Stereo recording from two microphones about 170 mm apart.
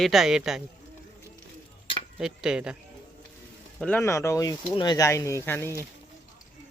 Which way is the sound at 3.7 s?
10° left (ahead or behind).